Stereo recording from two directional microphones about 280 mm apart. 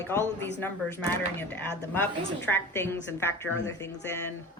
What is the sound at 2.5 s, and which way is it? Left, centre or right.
A woman's voice, centre.